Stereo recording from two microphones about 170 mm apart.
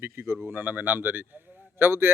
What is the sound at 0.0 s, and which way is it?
Speech, 15° right (ahead or behind).